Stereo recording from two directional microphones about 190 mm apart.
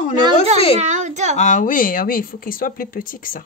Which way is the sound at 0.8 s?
40° right (ahead or behind).